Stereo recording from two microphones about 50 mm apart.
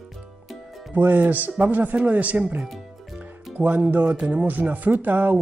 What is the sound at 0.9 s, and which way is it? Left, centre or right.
Speech, right.